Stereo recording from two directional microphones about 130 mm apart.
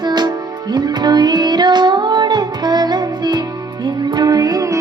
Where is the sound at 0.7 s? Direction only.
35° right (ahead or behind).